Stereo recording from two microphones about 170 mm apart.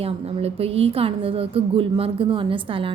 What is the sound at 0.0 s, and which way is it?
A woman's voice, 35° right (ahead or behind).